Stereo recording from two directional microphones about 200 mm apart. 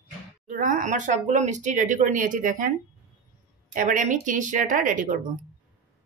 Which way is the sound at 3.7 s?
40° right (ahead or behind).